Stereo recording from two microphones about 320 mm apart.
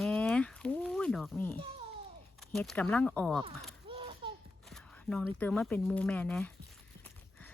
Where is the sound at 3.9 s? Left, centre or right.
Centre.